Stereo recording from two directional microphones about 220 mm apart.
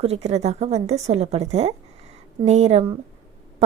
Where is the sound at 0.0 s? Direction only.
30° right (ahead or behind).